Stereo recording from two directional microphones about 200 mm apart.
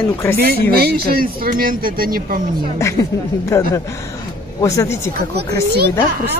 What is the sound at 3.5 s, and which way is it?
Speech, 15° left (ahead or behind).